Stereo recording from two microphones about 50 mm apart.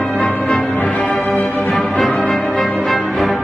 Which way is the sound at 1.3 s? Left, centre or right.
Left.